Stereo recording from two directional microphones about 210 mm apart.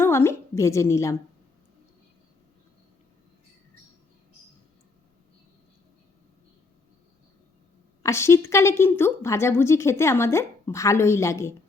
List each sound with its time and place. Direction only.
0.0 s a woman's voice: 10° left (ahead or behind)
8.0 s a woman's voice: 15° left (ahead or behind)